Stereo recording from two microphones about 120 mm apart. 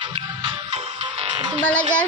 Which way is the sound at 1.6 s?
10° left (ahead or behind).